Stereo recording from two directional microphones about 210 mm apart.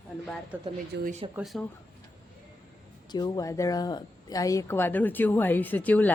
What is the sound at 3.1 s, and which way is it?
Speech, 20° left (ahead or behind).